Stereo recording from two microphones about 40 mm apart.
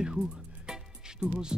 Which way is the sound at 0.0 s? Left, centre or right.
Centre.